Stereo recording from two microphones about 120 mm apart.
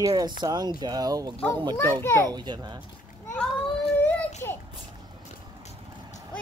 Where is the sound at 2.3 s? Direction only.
40° right (ahead or behind).